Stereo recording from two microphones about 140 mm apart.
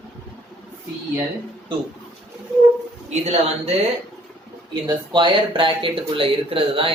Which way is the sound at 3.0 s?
50° right (ahead or behind).